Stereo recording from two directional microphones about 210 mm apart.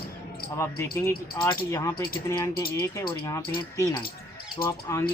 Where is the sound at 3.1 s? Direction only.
15° left (ahead or behind).